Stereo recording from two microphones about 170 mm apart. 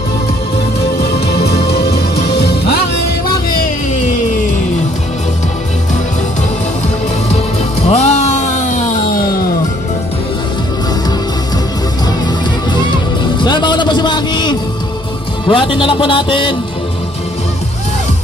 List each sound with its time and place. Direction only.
1.2 s music: 70° left (ahead or behind)
7.8 s music: 40° left (ahead or behind)
13.4 s music: 25° left (ahead or behind)
15.4 s speech: 30° left (ahead or behind)